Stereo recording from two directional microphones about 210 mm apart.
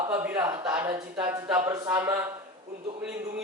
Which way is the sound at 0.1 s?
10° right (ahead or behind).